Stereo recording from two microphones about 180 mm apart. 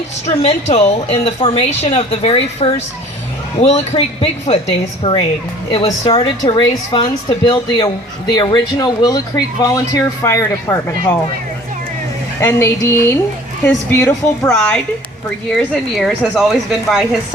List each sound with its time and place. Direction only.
0.3 s a woman's voice: 35° left (ahead or behind); by 11.2 s 15° left (ahead or behind)
12.4 s a woman's voice: 15° left (ahead or behind); by 17.2 s centre (ahead or behind)